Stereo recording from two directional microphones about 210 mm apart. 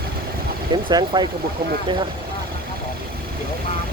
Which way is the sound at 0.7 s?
20° right (ahead or behind).